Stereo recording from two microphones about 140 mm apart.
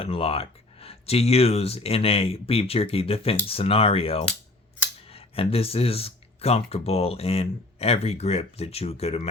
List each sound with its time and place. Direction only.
0.0 s speech: 40° left (ahead or behind)